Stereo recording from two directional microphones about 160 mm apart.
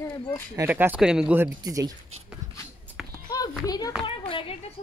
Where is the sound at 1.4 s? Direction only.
25° right (ahead or behind).